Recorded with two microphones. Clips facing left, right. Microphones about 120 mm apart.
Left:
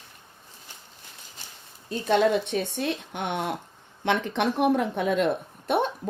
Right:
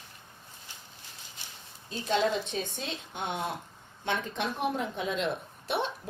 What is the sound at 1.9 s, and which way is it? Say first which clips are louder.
Speech: left 6 dB; 60° left (ahead or behind).